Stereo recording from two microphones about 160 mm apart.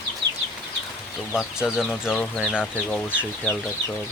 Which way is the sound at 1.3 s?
5° right (ahead or behind).